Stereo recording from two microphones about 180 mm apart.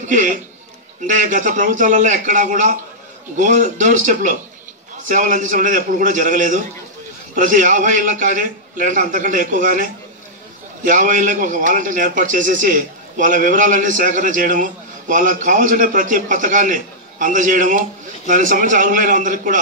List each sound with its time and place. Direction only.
0.0 s a man's voice: 45° right (ahead or behind)